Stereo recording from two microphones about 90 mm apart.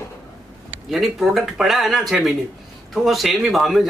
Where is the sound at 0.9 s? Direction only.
Centre (ahead or behind).